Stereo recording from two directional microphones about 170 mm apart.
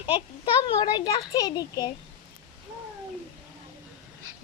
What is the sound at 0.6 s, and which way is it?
Speech, 25° left (ahead or behind).